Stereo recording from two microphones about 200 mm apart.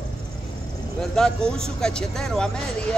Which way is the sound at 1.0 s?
5° left (ahead or behind).